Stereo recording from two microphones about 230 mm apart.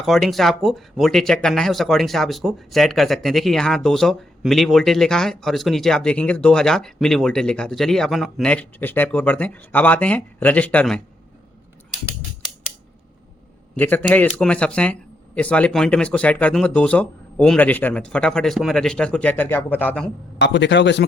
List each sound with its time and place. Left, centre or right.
0.0 s speech: centre
13.7 s speech: centre
20.4 s a man's voice: left